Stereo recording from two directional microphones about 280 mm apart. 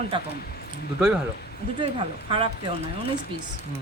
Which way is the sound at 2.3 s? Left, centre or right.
Centre.